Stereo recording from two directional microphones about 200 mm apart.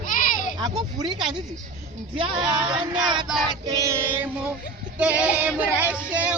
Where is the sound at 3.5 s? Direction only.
20° right (ahead or behind).